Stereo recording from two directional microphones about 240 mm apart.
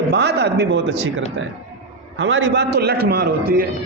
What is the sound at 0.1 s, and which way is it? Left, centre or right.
Speech, right.